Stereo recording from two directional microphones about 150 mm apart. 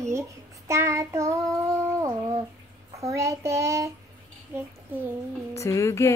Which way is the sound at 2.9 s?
20° right (ahead or behind).